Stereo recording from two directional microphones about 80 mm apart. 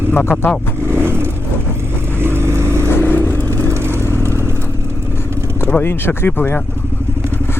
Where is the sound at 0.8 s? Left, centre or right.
Right.